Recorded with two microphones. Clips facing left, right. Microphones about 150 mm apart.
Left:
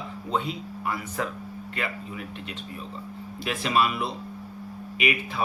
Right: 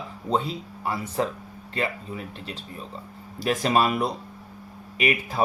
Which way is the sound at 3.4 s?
40° right (ahead or behind).